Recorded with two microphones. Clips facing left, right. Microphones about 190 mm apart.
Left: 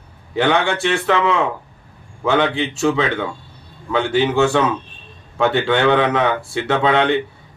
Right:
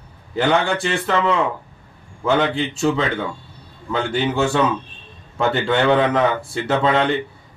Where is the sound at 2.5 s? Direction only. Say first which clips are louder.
Left 1 dB; centre (ahead or behind).